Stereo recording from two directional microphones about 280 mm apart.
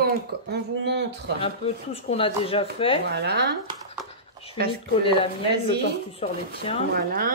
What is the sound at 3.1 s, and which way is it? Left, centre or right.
Speech, right.